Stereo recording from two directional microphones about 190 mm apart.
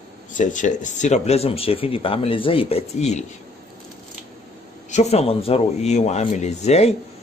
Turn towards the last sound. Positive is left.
turn(degrees=35)  # may be behind; listen again after turning